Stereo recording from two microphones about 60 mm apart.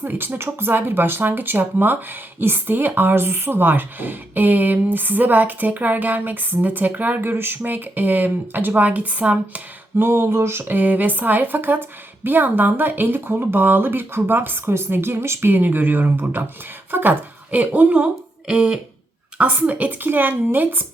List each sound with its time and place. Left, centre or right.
0.0 s speech: right
10.0 s speech: right